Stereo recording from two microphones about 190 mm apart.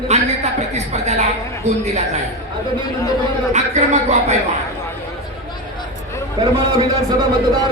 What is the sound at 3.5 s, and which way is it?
Speech, 40° right (ahead or behind).